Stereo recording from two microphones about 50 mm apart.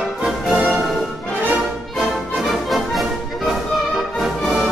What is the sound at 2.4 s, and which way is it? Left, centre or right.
Music, centre.